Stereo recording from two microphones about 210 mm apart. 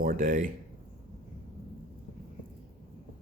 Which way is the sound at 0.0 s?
40° right (ahead or behind).